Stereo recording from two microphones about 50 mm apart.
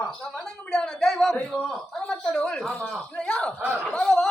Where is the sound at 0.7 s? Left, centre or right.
Centre.